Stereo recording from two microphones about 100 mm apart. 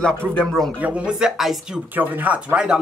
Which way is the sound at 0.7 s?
10° right (ahead or behind).